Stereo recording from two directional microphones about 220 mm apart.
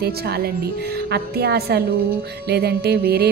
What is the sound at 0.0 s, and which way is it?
A woman's voice, 45° right (ahead or behind).